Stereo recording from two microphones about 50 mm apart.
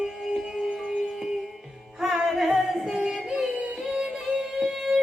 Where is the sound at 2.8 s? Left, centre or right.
Centre.